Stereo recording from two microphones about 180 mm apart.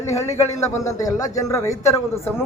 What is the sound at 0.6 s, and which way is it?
A man's voice, 15° left (ahead or behind).